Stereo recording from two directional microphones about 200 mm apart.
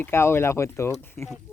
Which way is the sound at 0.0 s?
10° left (ahead or behind).